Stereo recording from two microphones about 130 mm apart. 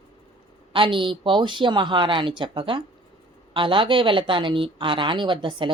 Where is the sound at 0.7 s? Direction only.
40° right (ahead or behind).